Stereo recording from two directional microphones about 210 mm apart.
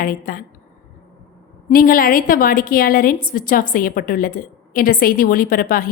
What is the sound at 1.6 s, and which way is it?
A woman's voice, 40° left (ahead or behind).